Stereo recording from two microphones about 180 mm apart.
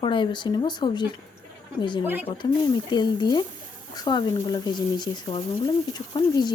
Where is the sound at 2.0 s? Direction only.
10° right (ahead or behind).